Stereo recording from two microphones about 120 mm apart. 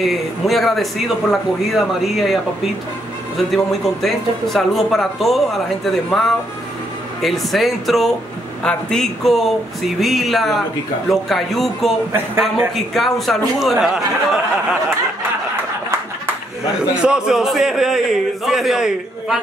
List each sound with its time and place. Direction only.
0.0 s speech: centre (ahead or behind)
3.3 s speech: centre (ahead or behind)
12.1 s a man's voice: 20° right (ahead or behind)
12.7 s speech: centre (ahead or behind)
16.9 s speech: 5° right (ahead or behind)